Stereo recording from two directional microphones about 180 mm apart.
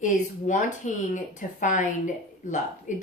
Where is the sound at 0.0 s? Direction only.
45° left (ahead or behind).